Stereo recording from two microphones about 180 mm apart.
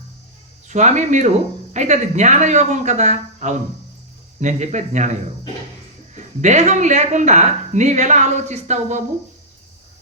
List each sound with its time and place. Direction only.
0.7 s speech: 40° right (ahead or behind)
6.1 s speech: 40° right (ahead or behind)